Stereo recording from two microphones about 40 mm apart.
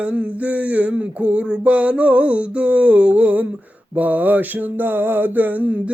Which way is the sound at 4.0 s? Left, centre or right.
Right.